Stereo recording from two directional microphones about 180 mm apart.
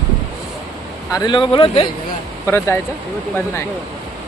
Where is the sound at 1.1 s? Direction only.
25° left (ahead or behind).